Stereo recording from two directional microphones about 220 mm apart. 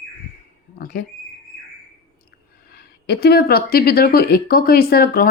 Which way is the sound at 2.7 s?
45° left (ahead or behind).